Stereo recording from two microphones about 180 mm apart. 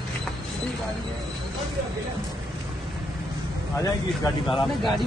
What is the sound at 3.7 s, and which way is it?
Speech, 15° left (ahead or behind).